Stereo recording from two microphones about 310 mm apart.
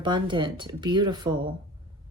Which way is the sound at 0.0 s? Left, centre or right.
Centre.